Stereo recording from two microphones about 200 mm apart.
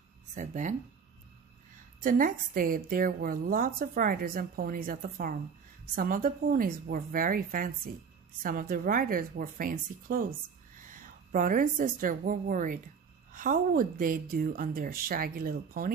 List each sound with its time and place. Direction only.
0.3 s speech: 35° right (ahead or behind)
2.0 s a woman's voice: 40° right (ahead or behind)